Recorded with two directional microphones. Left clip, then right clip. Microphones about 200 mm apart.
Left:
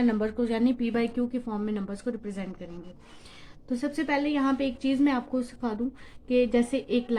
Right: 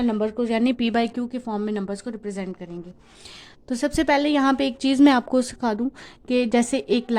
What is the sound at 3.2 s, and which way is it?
A woman's voice, 60° right (ahead or behind).